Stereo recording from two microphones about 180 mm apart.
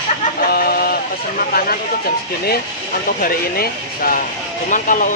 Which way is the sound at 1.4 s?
50° left (ahead or behind).